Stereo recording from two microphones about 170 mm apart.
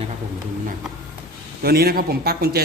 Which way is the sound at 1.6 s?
65° right (ahead or behind).